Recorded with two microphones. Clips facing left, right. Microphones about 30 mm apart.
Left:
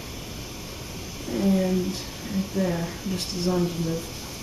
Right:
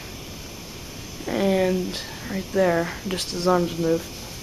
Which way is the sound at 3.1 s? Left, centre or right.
Right.